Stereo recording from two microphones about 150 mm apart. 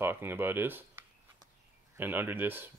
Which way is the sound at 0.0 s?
15° right (ahead or behind).